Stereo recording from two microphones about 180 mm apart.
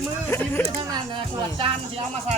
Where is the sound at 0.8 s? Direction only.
25° right (ahead or behind).